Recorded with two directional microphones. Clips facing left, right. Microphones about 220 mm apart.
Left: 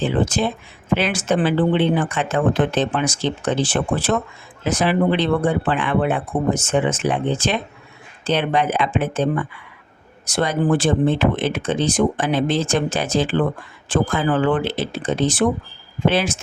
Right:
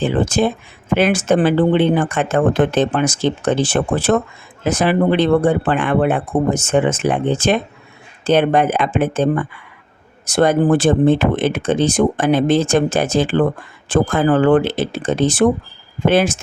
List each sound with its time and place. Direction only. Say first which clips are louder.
0.0 s speech: right 3 dB; 50° right (ahead or behind)